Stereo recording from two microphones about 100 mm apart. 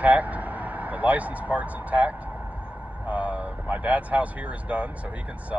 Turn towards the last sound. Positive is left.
turn(degrees=-15)  # may be behind; listen again after turning